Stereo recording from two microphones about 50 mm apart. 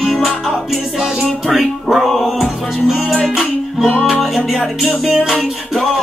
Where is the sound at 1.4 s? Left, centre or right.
Centre.